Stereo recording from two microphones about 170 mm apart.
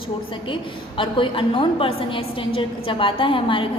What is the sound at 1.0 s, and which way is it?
A woman's voice, 30° left (ahead or behind).